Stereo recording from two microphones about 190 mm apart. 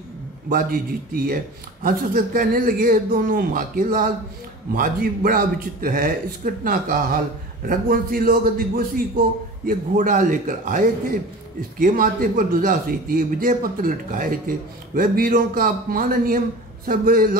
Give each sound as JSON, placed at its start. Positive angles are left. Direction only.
{"t": 0.5, "sound": "a man's voice", "side_deg": -50}